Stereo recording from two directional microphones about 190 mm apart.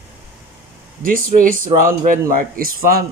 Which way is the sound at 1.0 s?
45° right (ahead or behind).